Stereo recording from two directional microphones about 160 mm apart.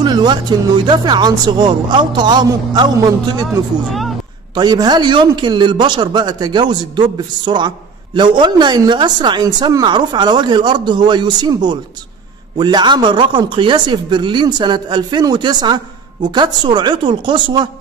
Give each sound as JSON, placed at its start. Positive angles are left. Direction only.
{"t": 0.0, "sound": "speech", "side_deg": -30}
{"t": 4.6, "sound": "speech", "side_deg": -25}